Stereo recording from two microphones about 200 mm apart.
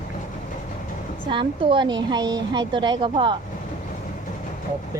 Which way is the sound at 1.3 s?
25° right (ahead or behind).